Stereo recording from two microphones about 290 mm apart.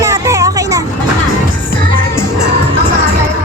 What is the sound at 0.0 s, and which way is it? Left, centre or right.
Music, centre.